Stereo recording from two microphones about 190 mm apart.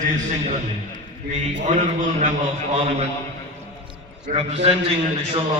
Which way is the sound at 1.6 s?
40° right (ahead or behind).